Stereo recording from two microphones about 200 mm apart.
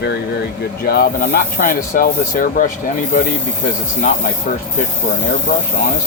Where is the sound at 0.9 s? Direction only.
45° left (ahead or behind).